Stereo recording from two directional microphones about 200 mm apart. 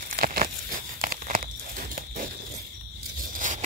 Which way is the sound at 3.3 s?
40° right (ahead or behind).